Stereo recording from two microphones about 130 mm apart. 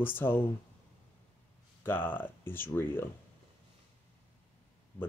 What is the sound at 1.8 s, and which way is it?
Speech, 15° left (ahead or behind).